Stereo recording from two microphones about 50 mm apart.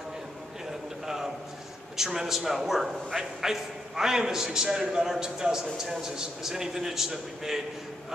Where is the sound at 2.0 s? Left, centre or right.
Centre.